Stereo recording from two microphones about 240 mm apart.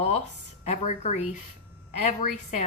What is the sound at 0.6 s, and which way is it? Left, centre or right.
A woman's voice, left.